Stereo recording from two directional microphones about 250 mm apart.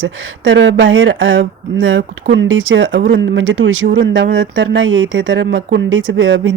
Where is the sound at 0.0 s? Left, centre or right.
Right.